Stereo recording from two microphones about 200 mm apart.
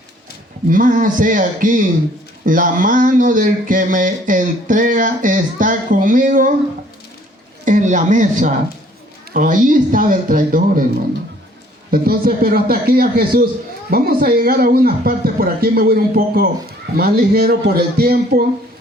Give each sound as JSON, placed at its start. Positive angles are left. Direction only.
{"t": 0.7, "sound": "speech", "side_deg": -40}
{"t": 7.6, "sound": "speech", "side_deg": -40}
{"t": 11.9, "sound": "speech", "side_deg": -50}